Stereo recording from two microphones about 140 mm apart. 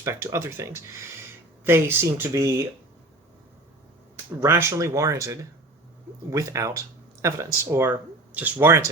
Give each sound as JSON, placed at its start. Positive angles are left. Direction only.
{"t": 0.0, "sound": "speech", "side_deg": -20}
{"t": 4.4, "sound": "speech", "side_deg": -20}